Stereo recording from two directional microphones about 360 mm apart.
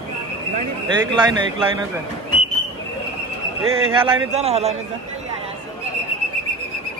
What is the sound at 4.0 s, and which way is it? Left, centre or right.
Speech, centre.